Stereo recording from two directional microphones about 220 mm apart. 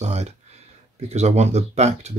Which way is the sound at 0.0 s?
30° right (ahead or behind).